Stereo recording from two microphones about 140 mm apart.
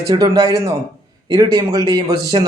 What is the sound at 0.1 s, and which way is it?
Speech, 25° right (ahead or behind).